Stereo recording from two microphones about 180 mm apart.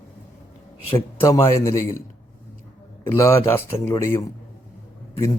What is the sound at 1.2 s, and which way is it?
Speech, 15° left (ahead or behind).